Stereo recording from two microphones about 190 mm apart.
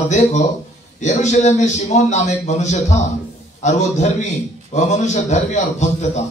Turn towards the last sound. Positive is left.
turn(degrees=35)  # may be behind; listen again after turning